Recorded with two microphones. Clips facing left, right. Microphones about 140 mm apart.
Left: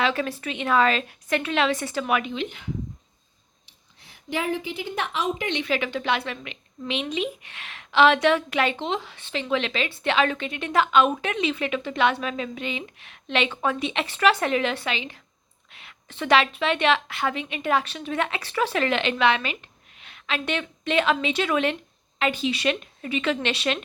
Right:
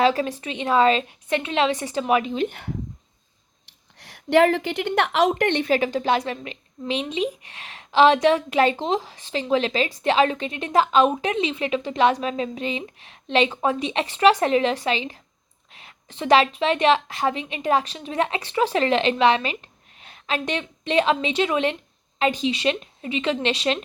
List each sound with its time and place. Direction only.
0.0 s a woman's voice: 35° right (ahead or behind)
2.5 s speech: 60° right (ahead or behind)
3.9 s a woman's voice: 80° right; by 23.8 s 30° right (ahead or behind)